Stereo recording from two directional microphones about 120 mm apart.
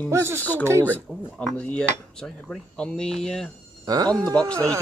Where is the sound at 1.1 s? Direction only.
5° left (ahead or behind).